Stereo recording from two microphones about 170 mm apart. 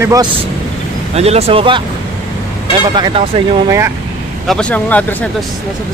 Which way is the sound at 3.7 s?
15° right (ahead or behind).